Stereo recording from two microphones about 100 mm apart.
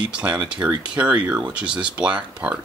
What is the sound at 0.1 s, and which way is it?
Speech, 10° right (ahead or behind).